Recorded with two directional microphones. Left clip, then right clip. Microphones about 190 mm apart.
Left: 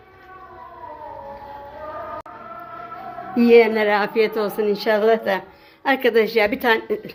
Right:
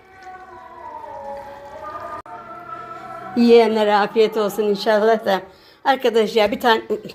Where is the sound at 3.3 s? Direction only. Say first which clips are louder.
Right 1 dB; 10° right (ahead or behind).